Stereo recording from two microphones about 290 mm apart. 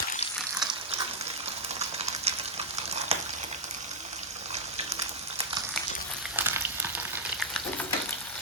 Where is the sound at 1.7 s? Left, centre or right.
Right.